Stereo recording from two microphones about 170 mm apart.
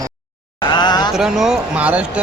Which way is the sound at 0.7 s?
25° left (ahead or behind).